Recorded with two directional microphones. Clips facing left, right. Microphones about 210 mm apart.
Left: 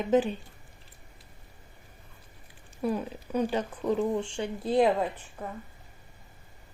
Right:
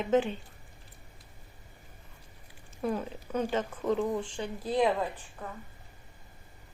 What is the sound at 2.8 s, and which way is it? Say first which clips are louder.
Speech: left 2 dB; 15° left (ahead or behind).